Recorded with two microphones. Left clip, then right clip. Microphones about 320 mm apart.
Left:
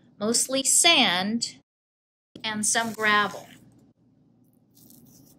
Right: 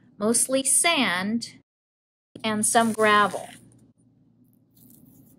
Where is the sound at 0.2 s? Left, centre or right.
Centre.